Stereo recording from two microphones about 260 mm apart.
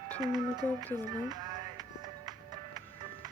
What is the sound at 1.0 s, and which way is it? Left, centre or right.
Music, centre.